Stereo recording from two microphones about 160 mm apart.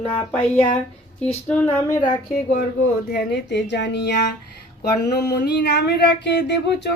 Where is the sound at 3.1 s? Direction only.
90° left.